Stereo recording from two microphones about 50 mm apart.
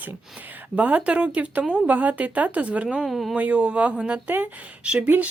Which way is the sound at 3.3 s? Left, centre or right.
Right.